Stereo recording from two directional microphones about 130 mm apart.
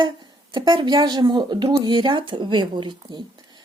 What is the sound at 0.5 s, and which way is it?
Speech, 35° right (ahead or behind).